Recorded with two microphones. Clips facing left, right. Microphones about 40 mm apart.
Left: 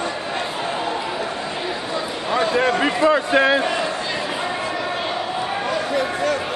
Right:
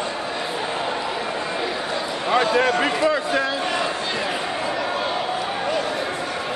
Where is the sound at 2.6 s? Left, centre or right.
Centre.